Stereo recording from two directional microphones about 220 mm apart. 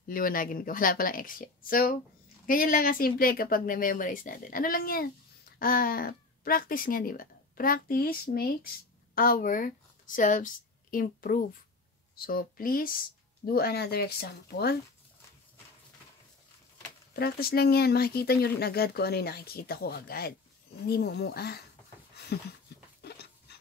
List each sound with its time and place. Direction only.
0.1 s speech: 40° left (ahead or behind)
17.1 s speech: 45° left (ahead or behind)
22.7 s a sound: 45° left (ahead or behind)